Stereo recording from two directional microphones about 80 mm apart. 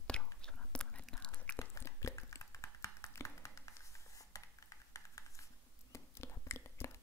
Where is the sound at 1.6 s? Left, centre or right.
Left.